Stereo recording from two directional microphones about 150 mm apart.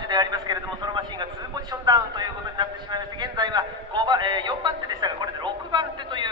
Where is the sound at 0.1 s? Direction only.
25° right (ahead or behind).